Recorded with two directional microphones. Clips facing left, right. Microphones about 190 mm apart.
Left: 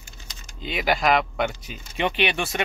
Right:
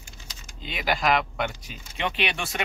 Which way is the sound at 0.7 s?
Centre (ahead or behind).